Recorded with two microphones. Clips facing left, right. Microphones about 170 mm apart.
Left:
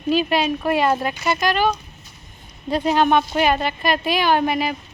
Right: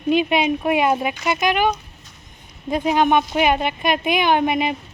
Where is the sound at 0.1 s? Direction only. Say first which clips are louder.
Right 1 dB; 20° right (ahead or behind).